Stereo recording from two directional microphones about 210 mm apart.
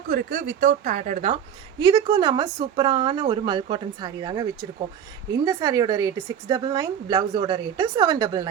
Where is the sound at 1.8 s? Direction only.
20° right (ahead or behind).